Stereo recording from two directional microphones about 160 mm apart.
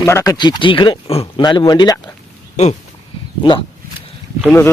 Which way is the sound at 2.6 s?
50° left (ahead or behind).